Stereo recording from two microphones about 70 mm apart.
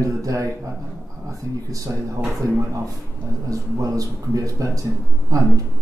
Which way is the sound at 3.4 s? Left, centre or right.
Right.